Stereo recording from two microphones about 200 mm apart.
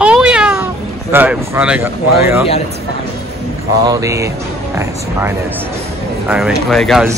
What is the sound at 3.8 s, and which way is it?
Speech, 15° right (ahead or behind).